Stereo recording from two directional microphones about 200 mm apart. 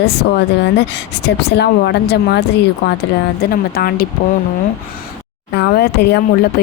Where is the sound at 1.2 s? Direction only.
55° left (ahead or behind).